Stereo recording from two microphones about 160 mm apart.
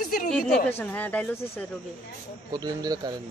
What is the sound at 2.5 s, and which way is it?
Speech, 25° right (ahead or behind).